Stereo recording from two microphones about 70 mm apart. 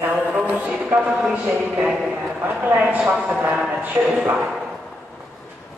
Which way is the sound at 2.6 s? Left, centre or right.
Right.